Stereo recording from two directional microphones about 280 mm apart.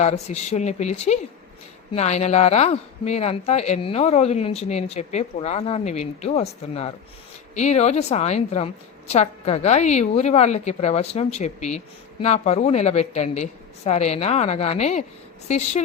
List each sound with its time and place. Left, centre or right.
0.0 s speech: left